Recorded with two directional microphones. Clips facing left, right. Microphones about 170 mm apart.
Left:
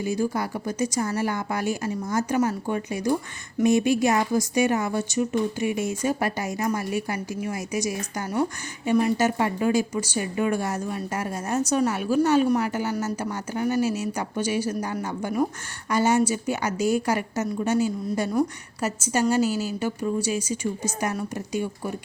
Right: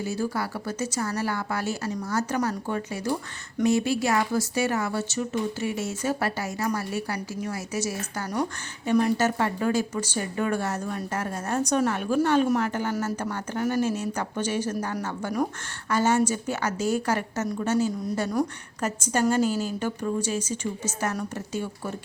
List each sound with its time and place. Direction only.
0.0 s a woman's voice: 15° left (ahead or behind)